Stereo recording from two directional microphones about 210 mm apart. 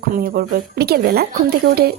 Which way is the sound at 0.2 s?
45° right (ahead or behind).